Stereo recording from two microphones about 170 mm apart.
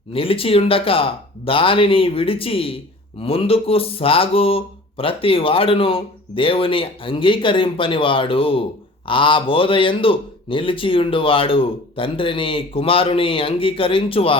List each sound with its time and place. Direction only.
0.1 s speech: 35° left (ahead or behind)